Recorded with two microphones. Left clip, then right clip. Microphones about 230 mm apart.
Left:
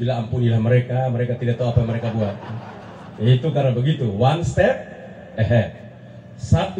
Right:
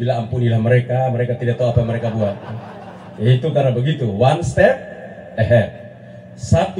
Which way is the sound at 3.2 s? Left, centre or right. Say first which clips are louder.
Right 4 dB; right.